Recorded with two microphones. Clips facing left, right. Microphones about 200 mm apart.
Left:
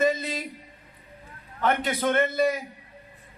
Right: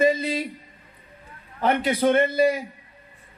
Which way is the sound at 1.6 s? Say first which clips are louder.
Right 4 dB; 30° right (ahead or behind).